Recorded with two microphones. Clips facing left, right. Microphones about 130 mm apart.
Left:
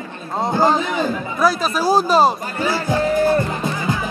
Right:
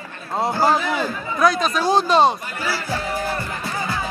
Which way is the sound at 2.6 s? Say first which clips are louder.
Left 7 dB; 20° left (ahead or behind).